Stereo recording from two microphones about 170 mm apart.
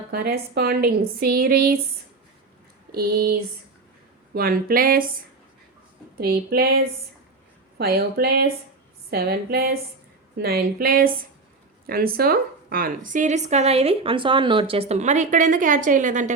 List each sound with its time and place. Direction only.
0.1 s a woman's voice: 65° right (ahead or behind)
2.9 s a woman's voice: 60° right (ahead or behind)
4.4 s a woman's voice: 60° right (ahead or behind)